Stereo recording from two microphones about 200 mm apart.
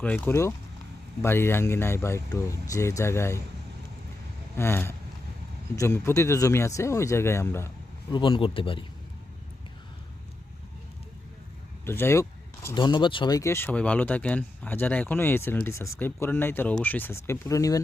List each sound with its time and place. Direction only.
0.0 s speech: 10° left (ahead or behind)
4.5 s speech: 10° left (ahead or behind)
8.1 s speech: 25° left (ahead or behind)
11.9 s speech: 10° left (ahead or behind)